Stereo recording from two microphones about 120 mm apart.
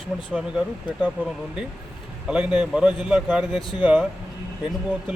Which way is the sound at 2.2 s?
10° right (ahead or behind).